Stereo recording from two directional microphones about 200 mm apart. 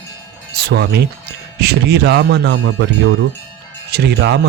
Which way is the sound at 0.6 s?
55° right (ahead or behind).